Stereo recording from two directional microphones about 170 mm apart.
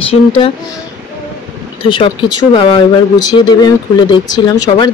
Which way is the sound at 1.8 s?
30° left (ahead or behind).